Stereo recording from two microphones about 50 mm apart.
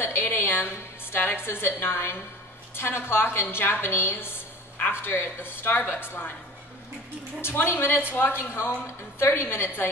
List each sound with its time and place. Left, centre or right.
0.0 s a sound: left
1.1 s a woman's voice: left
7.4 s a woman's voice: left